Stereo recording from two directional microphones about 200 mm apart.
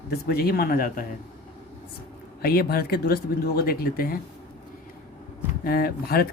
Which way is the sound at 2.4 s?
50° left (ahead or behind).